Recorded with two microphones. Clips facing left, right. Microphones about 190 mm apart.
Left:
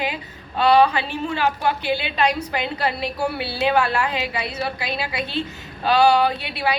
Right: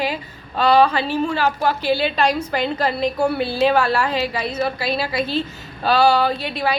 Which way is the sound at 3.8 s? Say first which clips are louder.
Right 3 dB; 40° right (ahead or behind).